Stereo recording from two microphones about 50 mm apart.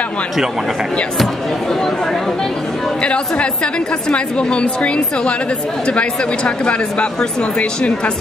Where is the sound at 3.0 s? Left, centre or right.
Left.